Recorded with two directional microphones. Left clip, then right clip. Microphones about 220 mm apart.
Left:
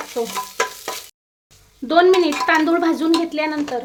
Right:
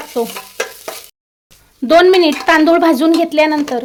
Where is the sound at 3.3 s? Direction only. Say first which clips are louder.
Right 10 dB; 45° right (ahead or behind).